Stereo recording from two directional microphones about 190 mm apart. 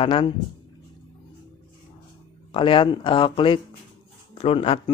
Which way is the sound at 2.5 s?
25° left (ahead or behind).